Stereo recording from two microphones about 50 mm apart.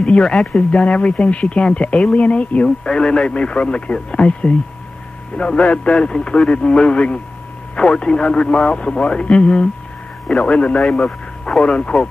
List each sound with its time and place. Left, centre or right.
0.0 s speech: left